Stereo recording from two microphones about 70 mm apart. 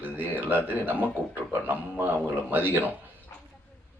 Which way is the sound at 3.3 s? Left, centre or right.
Left.